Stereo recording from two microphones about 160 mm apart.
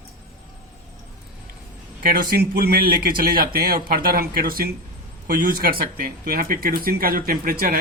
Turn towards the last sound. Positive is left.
turn(degrees=-65)  # may be behind; listen again after turning